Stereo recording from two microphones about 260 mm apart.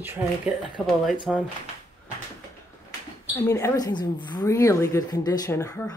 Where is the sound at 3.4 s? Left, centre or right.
Centre.